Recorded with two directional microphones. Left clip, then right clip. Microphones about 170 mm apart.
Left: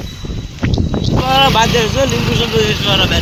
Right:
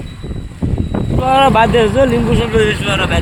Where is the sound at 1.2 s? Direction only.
55° right (ahead or behind).